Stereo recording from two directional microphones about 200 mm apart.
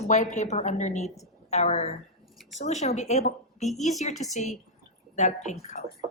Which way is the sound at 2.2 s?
Centre (ahead or behind).